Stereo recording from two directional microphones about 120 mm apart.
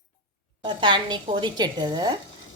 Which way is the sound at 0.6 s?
40° right (ahead or behind).